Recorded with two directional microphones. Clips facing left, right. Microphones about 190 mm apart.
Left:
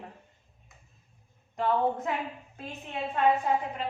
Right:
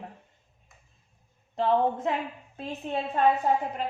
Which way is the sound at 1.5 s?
30° right (ahead or behind).